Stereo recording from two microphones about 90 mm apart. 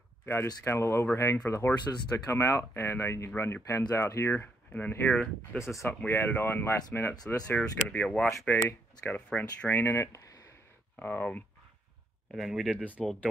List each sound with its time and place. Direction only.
0.2 s speech: 25° left (ahead or behind)
5.6 s speech: centre (ahead or behind)
5.9 s speech: 25° left (ahead or behind)
8.5 s speech: 25° left (ahead or behind)
11.0 s speech: 15° left (ahead or behind)
12.4 s speech: centre (ahead or behind)